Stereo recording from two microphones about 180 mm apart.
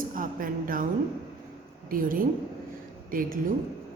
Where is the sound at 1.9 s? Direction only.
50° right (ahead or behind).